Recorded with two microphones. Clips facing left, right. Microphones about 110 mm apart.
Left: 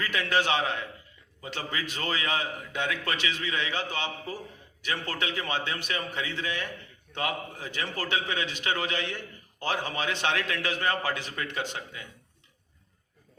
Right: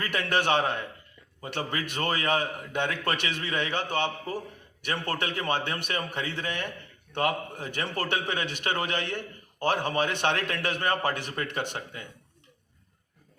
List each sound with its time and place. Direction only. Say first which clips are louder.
0.0 s a man's voice: even; 55° right (ahead or behind)